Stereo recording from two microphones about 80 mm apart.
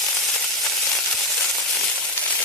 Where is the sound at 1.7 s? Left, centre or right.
Centre.